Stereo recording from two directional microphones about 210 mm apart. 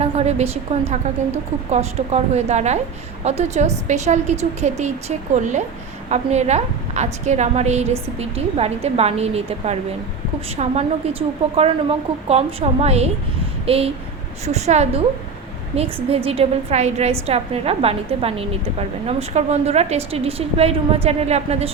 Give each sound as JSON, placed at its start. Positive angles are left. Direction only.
{"t": 0.0, "sound": "a woman's voice", "side_deg": -30}